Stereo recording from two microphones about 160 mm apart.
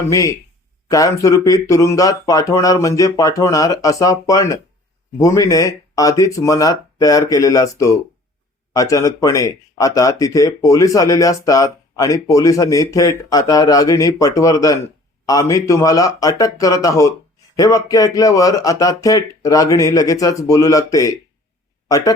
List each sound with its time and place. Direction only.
0.1 s speech: 20° left (ahead or behind)